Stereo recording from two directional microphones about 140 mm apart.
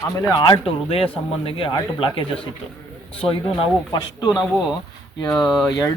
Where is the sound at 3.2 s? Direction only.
40° left (ahead or behind); by 5.9 s 20° left (ahead or behind).